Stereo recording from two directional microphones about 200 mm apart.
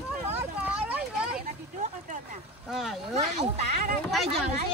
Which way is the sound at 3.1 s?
35° right (ahead or behind).